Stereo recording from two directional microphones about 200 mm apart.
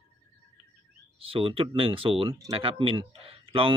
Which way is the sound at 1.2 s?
25° right (ahead or behind).